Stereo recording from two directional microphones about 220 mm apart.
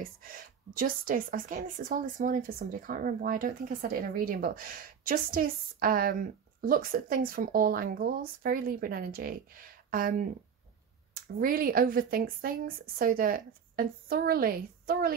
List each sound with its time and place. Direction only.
0.7 s a woman's voice: 40° right (ahead or behind)
11.3 s a woman's voice: 40° right (ahead or behind)